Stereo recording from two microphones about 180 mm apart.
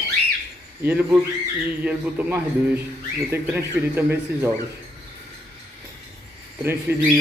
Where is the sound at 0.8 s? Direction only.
5° right (ahead or behind).